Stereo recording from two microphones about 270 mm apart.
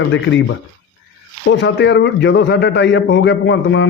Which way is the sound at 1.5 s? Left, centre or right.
Left.